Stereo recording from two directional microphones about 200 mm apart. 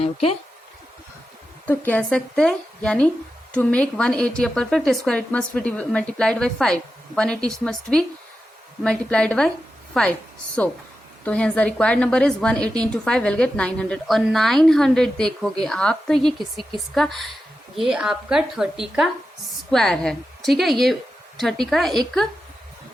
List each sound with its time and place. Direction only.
0.0 s speech: 30° left (ahead or behind)
1.6 s a woman's voice: 10° left (ahead or behind)